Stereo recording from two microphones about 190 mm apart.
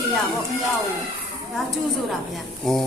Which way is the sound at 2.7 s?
Centre (ahead or behind).